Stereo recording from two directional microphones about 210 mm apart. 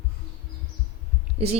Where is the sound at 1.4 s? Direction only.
25° right (ahead or behind).